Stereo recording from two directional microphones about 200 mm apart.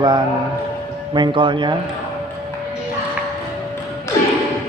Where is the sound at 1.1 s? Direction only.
25° right (ahead or behind).